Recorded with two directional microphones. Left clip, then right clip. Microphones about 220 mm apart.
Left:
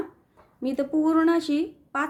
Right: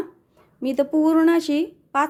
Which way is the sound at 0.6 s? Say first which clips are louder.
Right 5 dB; 30° right (ahead or behind).